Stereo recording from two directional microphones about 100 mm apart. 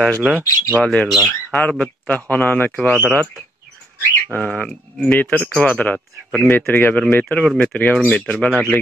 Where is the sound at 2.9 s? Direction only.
25° right (ahead or behind).